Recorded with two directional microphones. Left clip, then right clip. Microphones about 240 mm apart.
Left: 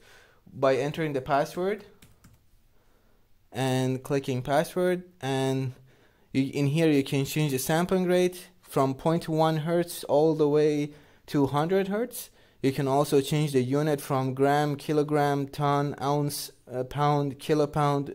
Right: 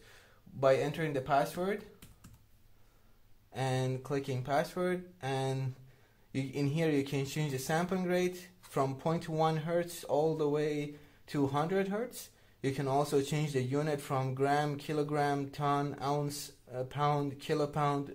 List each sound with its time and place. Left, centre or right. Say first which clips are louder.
0.0 s speech: left 4 dB; left
3.5 s speech: left 7 dB; left